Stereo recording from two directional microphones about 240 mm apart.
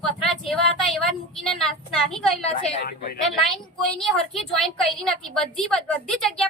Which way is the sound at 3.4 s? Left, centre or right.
Centre.